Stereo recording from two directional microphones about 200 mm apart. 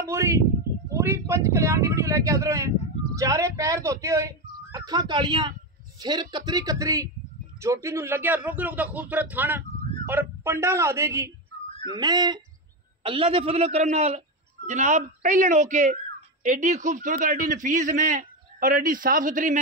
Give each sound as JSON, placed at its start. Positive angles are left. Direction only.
{"t": 0.0, "sound": "a man's voice", "side_deg": -15}